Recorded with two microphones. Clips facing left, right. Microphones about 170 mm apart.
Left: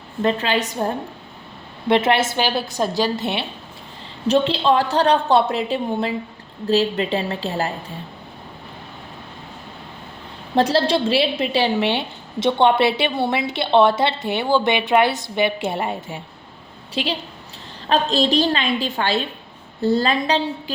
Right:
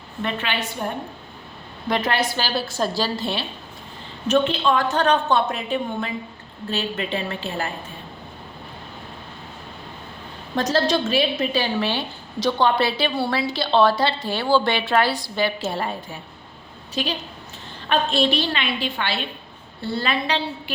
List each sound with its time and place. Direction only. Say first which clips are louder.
0.2 s a woman's voice: left 6 dB; 35° left (ahead or behind)
1.9 s a woman's voice: left 5 dB; 25° left (ahead or behind)
4.3 s a woman's voice: left 2 dB; 30° left (ahead or behind)
10.5 s a woman's voice: left 3 dB; 30° left (ahead or behind)